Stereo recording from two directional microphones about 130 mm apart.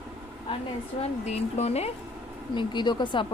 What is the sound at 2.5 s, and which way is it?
Speech, 35° left (ahead or behind).